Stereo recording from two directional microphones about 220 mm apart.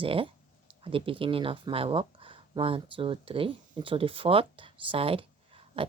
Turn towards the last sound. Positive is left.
turn(degrees=-25)  # may be behind; listen again after turning